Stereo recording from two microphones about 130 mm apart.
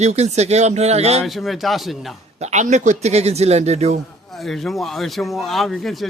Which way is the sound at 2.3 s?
60° right (ahead or behind).